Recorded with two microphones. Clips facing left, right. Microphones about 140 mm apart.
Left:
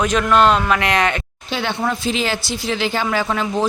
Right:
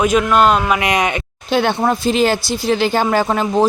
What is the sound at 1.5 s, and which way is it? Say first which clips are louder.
Speech: right 6 dB; 50° right (ahead or behind).